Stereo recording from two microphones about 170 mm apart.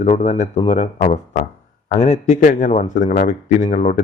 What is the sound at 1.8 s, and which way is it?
A man's voice, 40° left (ahead or behind).